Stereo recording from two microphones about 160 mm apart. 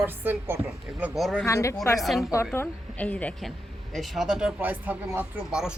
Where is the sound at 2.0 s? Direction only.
Centre (ahead or behind).